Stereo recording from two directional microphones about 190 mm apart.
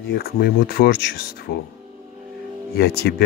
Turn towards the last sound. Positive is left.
turn(degrees=55)  # may be behind; listen again after turning